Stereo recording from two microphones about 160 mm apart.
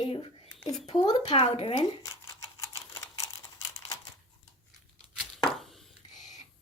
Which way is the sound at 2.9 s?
20° left (ahead or behind).